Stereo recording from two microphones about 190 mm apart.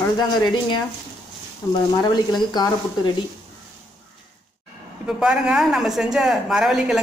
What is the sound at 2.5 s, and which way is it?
Speech, 20° left (ahead or behind).